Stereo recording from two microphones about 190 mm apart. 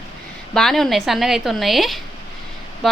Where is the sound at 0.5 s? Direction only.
Centre (ahead or behind).